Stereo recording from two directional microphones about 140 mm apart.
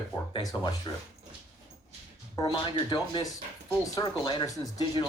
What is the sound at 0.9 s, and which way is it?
Speech, 25° left (ahead or behind).